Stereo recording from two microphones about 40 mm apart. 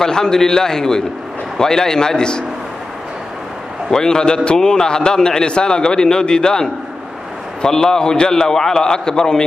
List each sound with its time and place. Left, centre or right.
0.0 s a man's voice: centre
3.9 s a man's voice: centre